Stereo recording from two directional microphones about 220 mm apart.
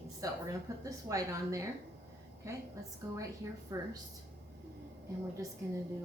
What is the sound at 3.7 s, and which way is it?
Speech, 15° right (ahead or behind).